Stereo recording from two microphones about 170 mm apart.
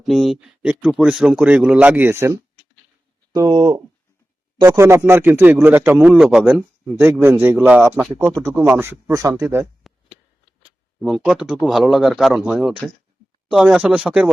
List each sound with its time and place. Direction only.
0.0 s speech: centre (ahead or behind)
9.8 s a sound: centre (ahead or behind)
11.0 s a man's voice: 5° right (ahead or behind)